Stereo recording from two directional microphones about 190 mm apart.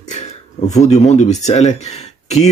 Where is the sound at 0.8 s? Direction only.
35° left (ahead or behind).